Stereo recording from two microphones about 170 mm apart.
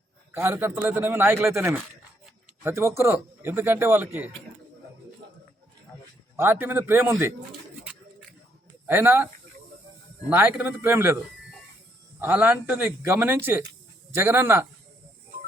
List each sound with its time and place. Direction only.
0.3 s speech: 15° right (ahead or behind)
6.3 s speech: 10° right (ahead or behind)
8.9 s speech: 10° right (ahead or behind)
12.2 s speech: 10° right (ahead or behind)